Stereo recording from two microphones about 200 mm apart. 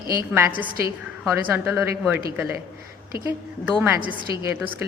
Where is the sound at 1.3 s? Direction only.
10° right (ahead or behind).